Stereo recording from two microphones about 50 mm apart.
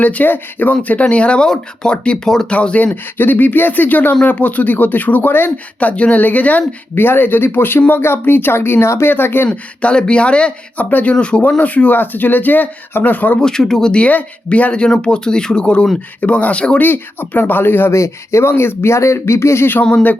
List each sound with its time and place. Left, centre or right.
0.0 s speech: left
2.9 s speech: left
6.0 s speech: left
6.9 s speech: left
7.8 s speech: left
8.0 s speech: left
9.5 s speech: left
13.4 s speech: centre
14.1 s speech: left
16.8 s speech: left
17.9 s speech: left
19.8 s speech: left